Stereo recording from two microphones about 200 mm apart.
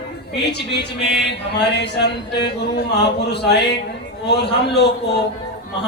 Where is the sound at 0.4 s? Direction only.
55° left (ahead or behind).